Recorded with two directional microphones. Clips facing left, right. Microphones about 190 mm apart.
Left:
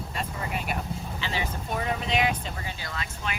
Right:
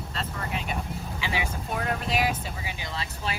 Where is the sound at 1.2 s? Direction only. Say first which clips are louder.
Right 2 dB; 10° right (ahead or behind).